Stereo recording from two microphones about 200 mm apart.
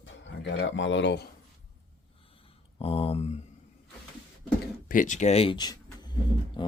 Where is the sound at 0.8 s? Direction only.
65° left (ahead or behind).